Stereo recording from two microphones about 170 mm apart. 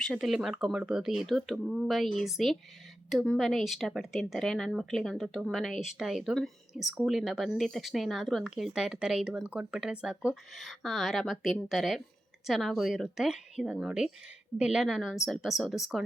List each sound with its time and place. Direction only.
0.0 s speech: centre (ahead or behind)